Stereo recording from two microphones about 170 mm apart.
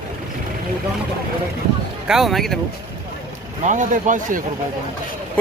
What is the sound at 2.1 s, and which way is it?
Speech, centre (ahead or behind).